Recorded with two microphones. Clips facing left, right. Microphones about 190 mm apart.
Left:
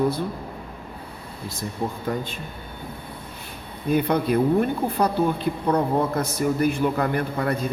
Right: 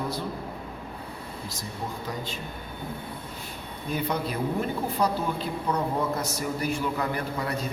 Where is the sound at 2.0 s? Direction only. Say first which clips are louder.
Left 6 dB; 55° left (ahead or behind).